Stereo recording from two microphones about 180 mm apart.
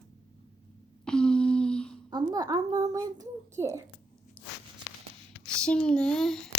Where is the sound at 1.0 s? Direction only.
5° left (ahead or behind).